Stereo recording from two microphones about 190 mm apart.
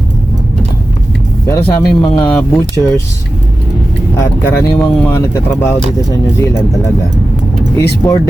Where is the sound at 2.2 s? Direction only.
10° left (ahead or behind).